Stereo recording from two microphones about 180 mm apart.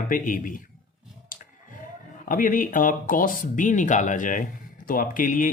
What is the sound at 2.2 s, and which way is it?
Speech, 50° left (ahead or behind).